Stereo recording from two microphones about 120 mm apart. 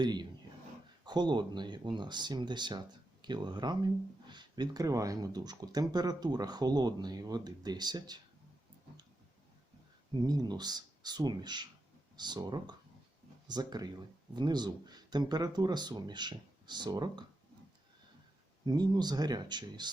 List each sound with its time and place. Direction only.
0.0 s speech: 35° right (ahead or behind)
10.2 s speech: 35° right (ahead or behind)
18.6 s speech: 35° right (ahead or behind)